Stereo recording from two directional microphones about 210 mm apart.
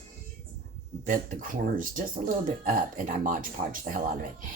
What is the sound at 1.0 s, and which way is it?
Speech, 40° right (ahead or behind).